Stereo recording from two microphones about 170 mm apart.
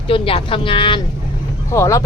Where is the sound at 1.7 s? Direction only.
15° left (ahead or behind).